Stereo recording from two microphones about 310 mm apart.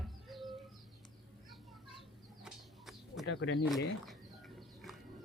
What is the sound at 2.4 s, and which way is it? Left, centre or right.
Bird, centre.